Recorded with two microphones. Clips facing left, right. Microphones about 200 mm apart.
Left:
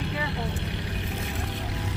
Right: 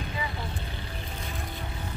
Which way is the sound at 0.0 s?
70° left (ahead or behind).